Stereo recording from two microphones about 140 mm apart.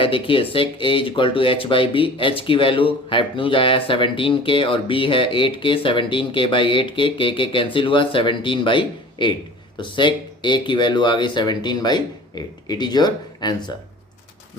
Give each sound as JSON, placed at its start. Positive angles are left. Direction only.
{"t": 0.0, "sound": "speech", "side_deg": 40}